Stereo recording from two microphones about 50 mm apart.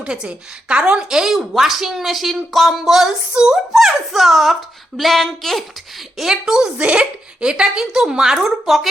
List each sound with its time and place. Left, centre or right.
0.0 s a woman's voice: centre
3.3 s a woman's voice: centre
3.7 s speech: centre
6.1 s a woman's voice: centre